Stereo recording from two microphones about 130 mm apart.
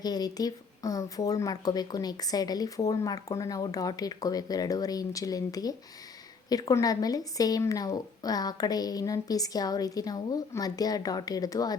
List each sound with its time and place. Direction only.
0.0 s speech: 30° left (ahead or behind)